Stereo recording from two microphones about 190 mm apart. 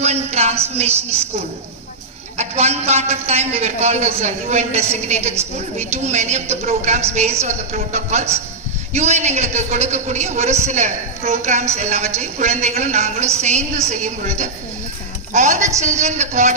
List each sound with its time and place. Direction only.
0.0 s a sound: 35° right (ahead or behind)
0.8 s a man's voice: 35° right (ahead or behind)
2.4 s a man's voice: 35° right (ahead or behind)